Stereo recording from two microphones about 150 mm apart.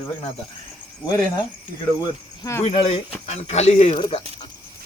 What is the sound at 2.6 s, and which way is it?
Speech, 40° left (ahead or behind).